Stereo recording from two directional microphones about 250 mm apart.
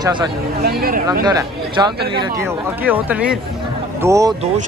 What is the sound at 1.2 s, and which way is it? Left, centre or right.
Speech, centre.